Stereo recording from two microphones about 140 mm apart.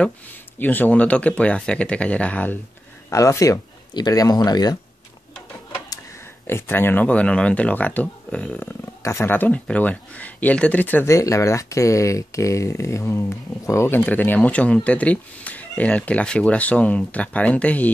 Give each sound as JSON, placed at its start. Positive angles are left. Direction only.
{"t": 0.6, "sound": "speech", "side_deg": 15}
{"t": 3.1, "sound": "speech", "side_deg": 25}
{"t": 6.4, "sound": "speech", "side_deg": 15}